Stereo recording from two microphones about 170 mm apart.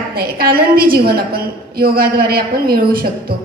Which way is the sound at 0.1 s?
60° right (ahead or behind).